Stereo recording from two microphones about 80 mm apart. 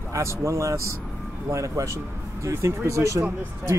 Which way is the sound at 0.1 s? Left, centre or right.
Right.